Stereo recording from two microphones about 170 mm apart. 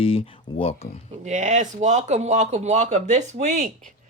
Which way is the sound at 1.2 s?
45° right (ahead or behind).